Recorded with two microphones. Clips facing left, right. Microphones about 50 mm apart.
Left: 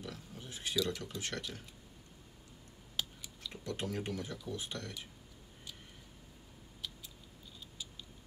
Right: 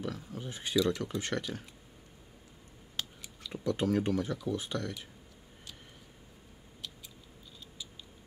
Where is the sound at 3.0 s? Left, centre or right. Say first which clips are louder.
Even; centre.